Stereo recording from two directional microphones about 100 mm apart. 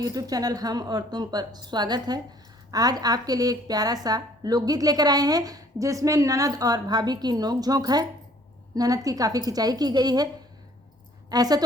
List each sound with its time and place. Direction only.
0.0 s a woman's voice: 40° right (ahead or behind)
11.3 s a woman's voice: 40° right (ahead or behind)